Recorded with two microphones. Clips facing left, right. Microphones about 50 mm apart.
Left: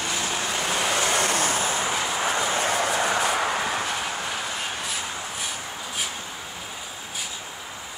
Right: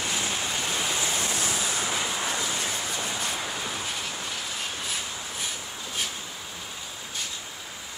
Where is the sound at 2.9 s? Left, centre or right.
Left.